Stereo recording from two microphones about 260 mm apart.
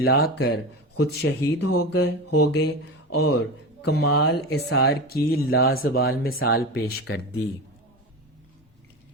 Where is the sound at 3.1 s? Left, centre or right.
Left.